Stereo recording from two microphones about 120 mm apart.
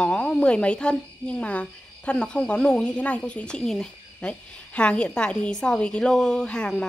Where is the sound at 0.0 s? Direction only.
5° left (ahead or behind).